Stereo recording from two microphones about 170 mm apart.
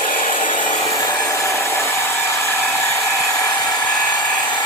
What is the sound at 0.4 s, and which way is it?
Wood, 30° left (ahead or behind).